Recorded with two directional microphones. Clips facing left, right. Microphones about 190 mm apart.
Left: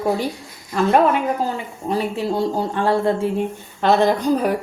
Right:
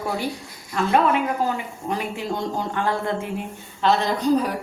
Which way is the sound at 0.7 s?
50° left (ahead or behind).